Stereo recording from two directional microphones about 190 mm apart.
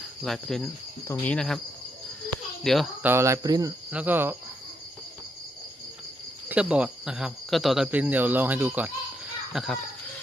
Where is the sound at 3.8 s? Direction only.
10° right (ahead or behind).